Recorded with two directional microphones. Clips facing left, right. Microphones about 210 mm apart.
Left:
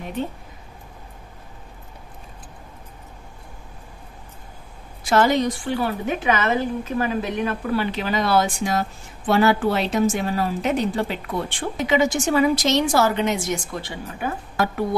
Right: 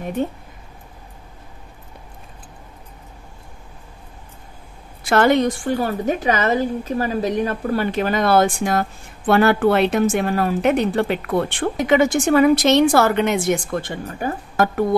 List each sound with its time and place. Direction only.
5.0 s a woman's voice: 60° right (ahead or behind)